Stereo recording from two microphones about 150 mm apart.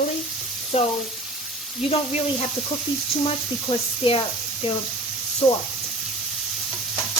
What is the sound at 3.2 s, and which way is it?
Speech, 40° left (ahead or behind).